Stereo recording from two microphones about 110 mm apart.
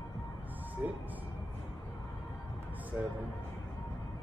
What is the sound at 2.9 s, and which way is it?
Speech, 20° right (ahead or behind).